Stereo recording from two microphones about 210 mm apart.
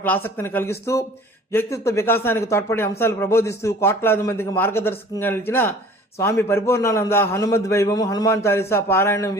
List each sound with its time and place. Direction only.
0.0 s a man's voice: 10° left (ahead or behind)